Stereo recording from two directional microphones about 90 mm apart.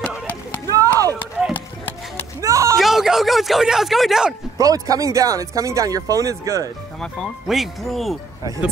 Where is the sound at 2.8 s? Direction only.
5° right (ahead or behind).